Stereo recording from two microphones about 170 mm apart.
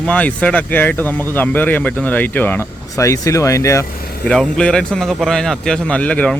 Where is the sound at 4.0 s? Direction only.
65° left (ahead or behind).